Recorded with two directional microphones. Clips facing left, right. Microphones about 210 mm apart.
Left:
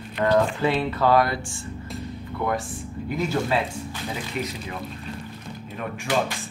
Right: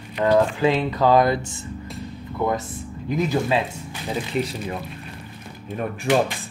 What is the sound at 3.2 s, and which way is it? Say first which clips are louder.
Speech: right 3 dB; 15° right (ahead or behind).